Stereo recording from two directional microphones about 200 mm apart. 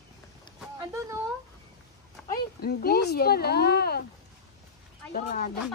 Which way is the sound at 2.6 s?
50° left (ahead or behind).